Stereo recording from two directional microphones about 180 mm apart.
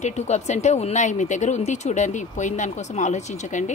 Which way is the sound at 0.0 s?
40° left (ahead or behind).